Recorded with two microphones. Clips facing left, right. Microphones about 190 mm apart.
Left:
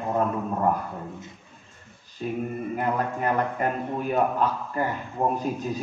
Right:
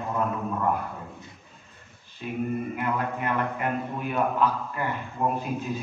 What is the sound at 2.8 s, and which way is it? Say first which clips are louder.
A man's voice: left 2 dB; 40° left (ahead or behind).